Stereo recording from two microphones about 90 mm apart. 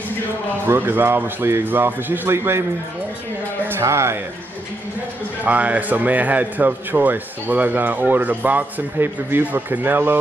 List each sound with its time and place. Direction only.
0.7 s speech: 25° right (ahead or behind)
3.7 s speech: 30° right (ahead or behind)
5.4 s speech: 15° right (ahead or behind)